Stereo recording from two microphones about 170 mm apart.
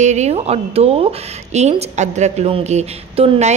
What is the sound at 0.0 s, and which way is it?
A woman's voice, 45° right (ahead or behind).